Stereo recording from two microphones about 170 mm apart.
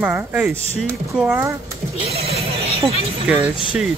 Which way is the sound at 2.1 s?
35° right (ahead or behind).